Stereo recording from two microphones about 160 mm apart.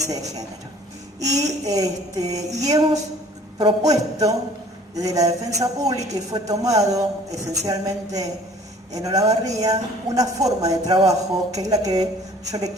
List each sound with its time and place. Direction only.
0.1 s a woman's voice: 20° right (ahead or behind)